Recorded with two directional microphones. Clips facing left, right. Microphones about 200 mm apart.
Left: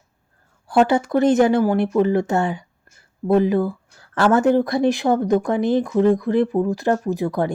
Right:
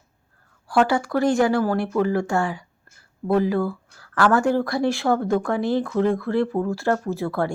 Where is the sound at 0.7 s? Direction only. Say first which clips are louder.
Left 3 dB; 20° left (ahead or behind).